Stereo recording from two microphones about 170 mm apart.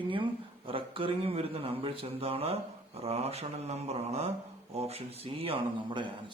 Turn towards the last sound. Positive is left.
turn(degrees=-30)  # may be behind; listen again after turning